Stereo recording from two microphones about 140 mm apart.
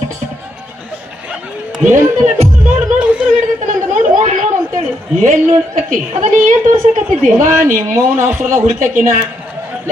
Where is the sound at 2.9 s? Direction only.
10° right (ahead or behind).